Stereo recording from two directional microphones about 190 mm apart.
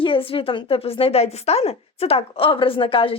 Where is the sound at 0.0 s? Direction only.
30° left (ahead or behind).